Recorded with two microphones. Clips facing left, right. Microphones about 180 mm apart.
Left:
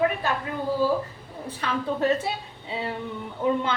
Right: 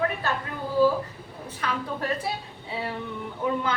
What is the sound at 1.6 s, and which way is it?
Speech, 25° left (ahead or behind).